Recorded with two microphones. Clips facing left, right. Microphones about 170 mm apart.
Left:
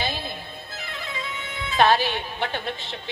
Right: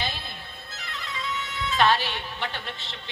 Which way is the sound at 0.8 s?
55° left (ahead or behind).